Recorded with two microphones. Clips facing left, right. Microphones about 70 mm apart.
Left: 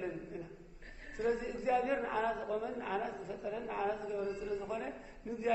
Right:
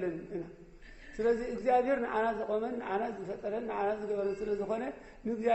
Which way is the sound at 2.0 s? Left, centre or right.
Right.